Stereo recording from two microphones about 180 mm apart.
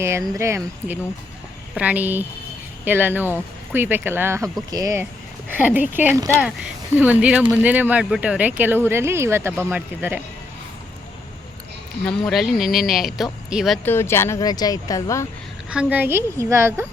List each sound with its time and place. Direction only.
0.0 s speech: 15° right (ahead or behind)
12.0 s speech: centre (ahead or behind)
13.8 s speech: 15° left (ahead or behind)
15.7 s speech: 5° right (ahead or behind)